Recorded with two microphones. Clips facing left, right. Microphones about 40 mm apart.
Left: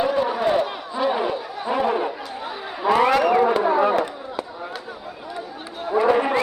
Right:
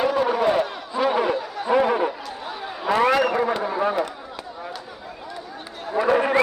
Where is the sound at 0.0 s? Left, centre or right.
Centre.